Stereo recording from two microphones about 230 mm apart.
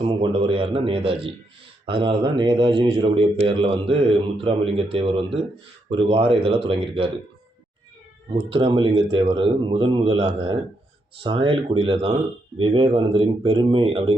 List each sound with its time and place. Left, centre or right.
0.0 s speech: right
8.3 s speech: right